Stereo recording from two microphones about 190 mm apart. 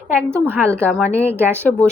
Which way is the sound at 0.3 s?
10° right (ahead or behind).